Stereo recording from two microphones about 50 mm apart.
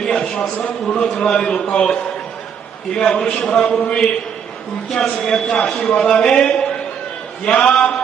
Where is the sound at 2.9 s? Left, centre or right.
Centre.